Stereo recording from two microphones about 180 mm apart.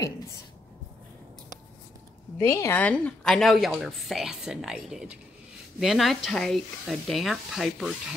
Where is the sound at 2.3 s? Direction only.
15° left (ahead or behind).